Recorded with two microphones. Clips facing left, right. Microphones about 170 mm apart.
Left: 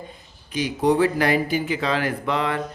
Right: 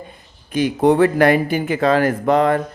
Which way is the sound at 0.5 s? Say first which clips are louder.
Right 5 dB; 55° right (ahead or behind).